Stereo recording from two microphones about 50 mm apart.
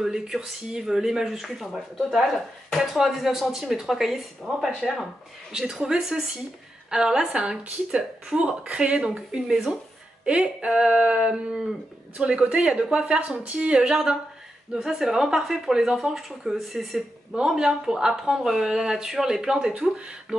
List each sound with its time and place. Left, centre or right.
0.0 s speech: centre
5.5 s speech: centre